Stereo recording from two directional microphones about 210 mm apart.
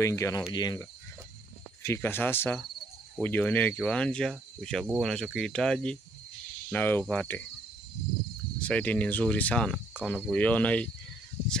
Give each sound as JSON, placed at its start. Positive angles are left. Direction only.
{"t": 0.0, "sound": "speech", "side_deg": 15}
{"t": 0.5, "sound": "cricket", "side_deg": 20}
{"t": 1.8, "sound": "speech", "side_deg": 10}
{"t": 8.6, "sound": "speech", "side_deg": 5}